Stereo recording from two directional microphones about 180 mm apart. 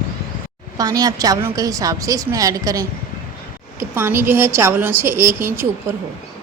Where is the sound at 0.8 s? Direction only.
20° right (ahead or behind).